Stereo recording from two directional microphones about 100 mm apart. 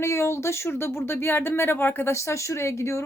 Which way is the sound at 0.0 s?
25° left (ahead or behind).